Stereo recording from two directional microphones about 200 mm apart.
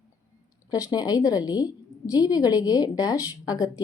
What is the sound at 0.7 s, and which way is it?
A woman's voice, 20° left (ahead or behind).